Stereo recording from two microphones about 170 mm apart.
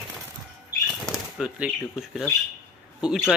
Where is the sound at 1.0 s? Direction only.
5° right (ahead or behind).